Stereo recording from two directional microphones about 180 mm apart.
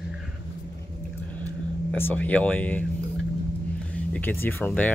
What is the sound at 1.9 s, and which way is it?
Speech, 10° left (ahead or behind).